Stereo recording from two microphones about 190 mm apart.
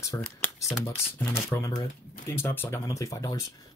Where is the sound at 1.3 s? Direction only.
15° left (ahead or behind).